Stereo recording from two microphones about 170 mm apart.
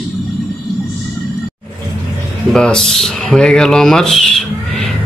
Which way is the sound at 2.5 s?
5° left (ahead or behind).